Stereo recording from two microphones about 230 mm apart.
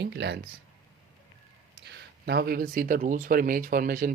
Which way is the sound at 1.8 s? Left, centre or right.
Right.